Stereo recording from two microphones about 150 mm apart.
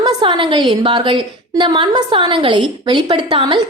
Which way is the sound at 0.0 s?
30° right (ahead or behind).